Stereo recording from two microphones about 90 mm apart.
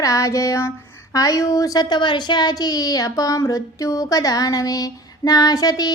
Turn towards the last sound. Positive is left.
turn(degrees=45)  # may be behind; listen again after turning